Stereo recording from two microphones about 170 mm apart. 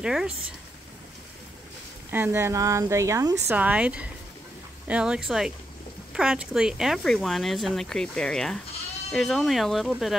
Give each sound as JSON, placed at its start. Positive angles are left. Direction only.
{"t": 0.0, "sound": "speech", "side_deg": -5}
{"t": 2.0, "sound": "speech", "side_deg": -10}